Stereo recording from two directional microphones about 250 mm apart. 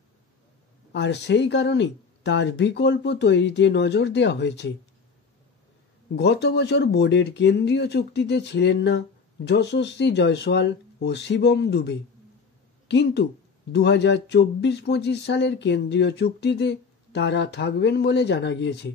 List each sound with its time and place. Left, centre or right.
0.9 s speech: left
6.1 s speech: left